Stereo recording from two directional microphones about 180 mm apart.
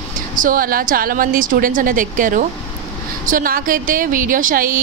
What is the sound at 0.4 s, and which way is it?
A woman's voice, 50° right (ahead or behind).